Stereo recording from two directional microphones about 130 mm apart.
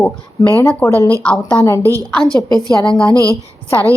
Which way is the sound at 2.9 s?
5° left (ahead or behind).